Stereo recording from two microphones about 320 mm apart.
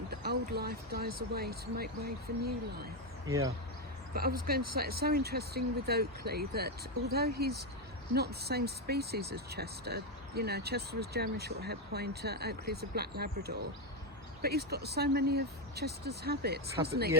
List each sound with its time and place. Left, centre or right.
0.1 s speech: right
3.2 s speech: centre
4.1 s speech: right